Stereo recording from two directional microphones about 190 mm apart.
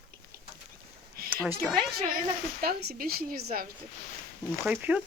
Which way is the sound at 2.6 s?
50° right (ahead or behind).